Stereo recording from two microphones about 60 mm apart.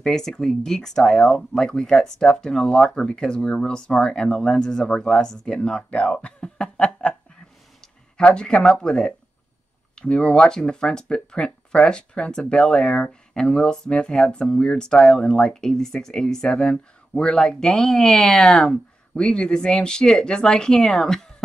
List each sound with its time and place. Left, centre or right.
0.0 s speech: centre